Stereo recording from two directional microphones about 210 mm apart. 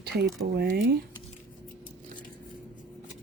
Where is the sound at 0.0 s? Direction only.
50° right (ahead or behind).